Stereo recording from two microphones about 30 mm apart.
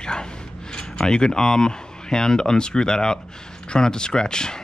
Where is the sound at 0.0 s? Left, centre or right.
Left.